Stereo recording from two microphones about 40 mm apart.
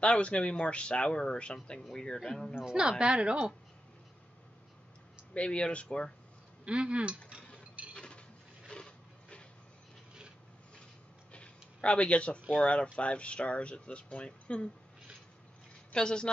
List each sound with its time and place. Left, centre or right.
0.0 s speech: left; by 2.5 s centre
2.5 s a woman's voice: centre
5.3 s speech: left
6.6 s a woman's voice: right
7.9 s a sound: left
11.3 s a sound: left
12.6 s speech: left
15.9 s speech: left